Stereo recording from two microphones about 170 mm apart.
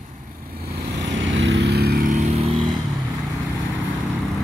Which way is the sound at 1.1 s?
90° right.